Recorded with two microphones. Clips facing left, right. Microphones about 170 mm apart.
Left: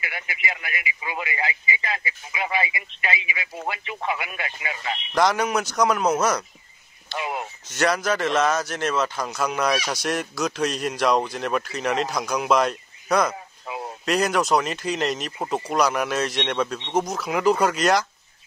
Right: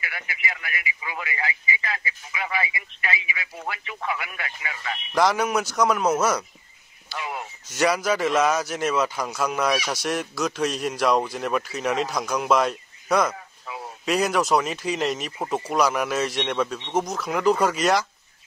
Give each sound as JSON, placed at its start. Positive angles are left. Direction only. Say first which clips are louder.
{"t": 0.0, "sound": "speech", "louder": "left 1 dB", "side_deg": 20}
{"t": 5.1, "sound": "a man's voice", "louder": "even", "side_deg": -5}
{"t": 7.2, "sound": "speech", "louder": "left 3 dB", "side_deg": 20}
{"t": 7.7, "sound": "a man's voice", "louder": "even", "side_deg": -10}
{"t": 13.3, "sound": "a sound", "louder": "left 3 dB", "side_deg": 20}
{"t": 14.0, "sound": "a man's voice", "louder": "even", "side_deg": -5}